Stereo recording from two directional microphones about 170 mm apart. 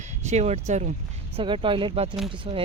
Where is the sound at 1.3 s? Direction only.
30° right (ahead or behind).